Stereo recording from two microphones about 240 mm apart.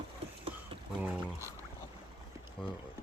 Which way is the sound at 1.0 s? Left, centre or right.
Centre.